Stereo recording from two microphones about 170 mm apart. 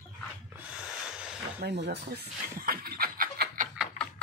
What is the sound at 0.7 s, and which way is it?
Snort, 5° right (ahead or behind).